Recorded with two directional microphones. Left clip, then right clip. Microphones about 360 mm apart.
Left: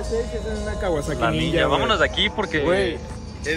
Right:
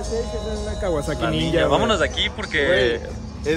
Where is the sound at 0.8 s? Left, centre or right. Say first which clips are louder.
Even; centre.